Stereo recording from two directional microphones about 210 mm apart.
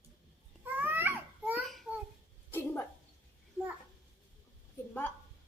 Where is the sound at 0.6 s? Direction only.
10° right (ahead or behind).